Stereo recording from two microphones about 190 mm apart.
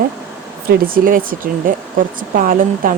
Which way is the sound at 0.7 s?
45° right (ahead or behind).